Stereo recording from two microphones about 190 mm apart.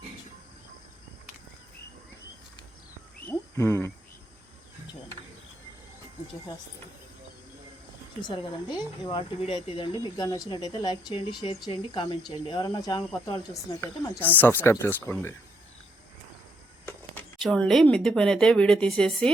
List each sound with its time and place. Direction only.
3.2 s a sound: 15° left (ahead or behind)
8.2 s speech: 25° left (ahead or behind)
16.8 s speech: 5° left (ahead or behind)